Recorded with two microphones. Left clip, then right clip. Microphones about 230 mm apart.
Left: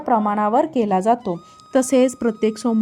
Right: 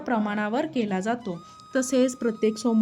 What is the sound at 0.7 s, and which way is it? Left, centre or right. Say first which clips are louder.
A woman's voice: left 10 dB; left.